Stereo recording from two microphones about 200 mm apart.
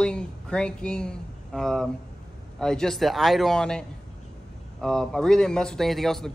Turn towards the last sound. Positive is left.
turn(degrees=0)  # may be behind; listen again after turning